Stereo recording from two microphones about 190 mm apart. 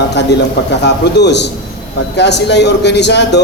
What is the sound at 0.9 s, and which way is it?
A man's voice, 65° left (ahead or behind).